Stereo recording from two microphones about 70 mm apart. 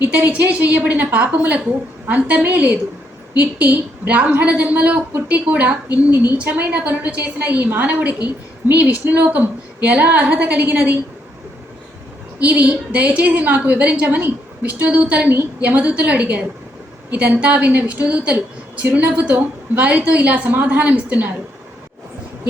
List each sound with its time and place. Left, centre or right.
0.0 s a woman's voice: right
12.4 s a woman's voice: right